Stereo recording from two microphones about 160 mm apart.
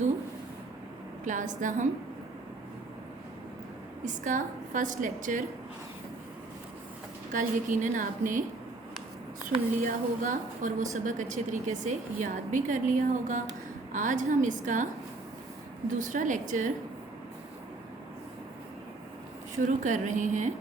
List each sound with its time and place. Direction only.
1.2 s a woman's voice: 50° right (ahead or behind)
4.0 s a woman's voice: 50° right (ahead or behind)
7.3 s a woman's voice: 50° right (ahead or behind)
9.8 s a woman's voice: 55° right (ahead or behind)
16.0 s a woman's voice: 50° right (ahead or behind)
19.5 s a woman's voice: 55° right (ahead or behind)